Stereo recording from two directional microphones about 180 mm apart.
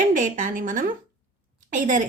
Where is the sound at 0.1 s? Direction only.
45° right (ahead or behind).